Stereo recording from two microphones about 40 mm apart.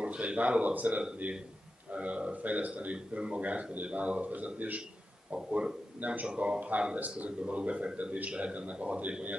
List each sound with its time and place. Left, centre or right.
0.0 s a man's voice: right
5.3 s speech: right
5.9 s speech: right
6.2 s speech: right